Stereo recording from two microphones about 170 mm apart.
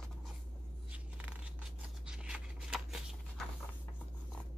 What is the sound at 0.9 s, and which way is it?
Scissors, 10° right (ahead or behind).